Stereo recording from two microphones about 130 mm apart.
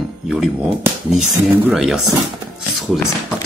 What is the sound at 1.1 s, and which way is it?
Speech, centre (ahead or behind).